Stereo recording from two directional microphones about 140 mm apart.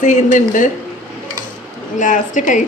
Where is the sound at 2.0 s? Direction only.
65° left (ahead or behind).